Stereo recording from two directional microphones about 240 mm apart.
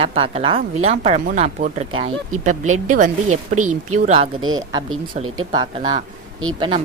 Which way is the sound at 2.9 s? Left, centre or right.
Right.